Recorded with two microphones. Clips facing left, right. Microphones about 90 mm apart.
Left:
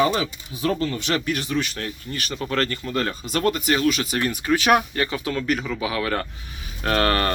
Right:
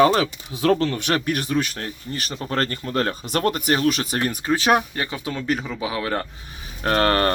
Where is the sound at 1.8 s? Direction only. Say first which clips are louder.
Even; 30° right (ahead or behind).